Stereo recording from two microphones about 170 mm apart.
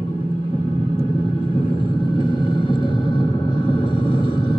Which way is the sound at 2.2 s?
30° left (ahead or behind).